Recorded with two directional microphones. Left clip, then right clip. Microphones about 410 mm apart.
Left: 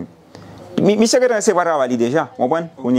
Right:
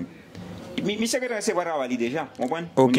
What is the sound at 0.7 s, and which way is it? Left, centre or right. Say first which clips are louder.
A man's voice: left 13 dB; left.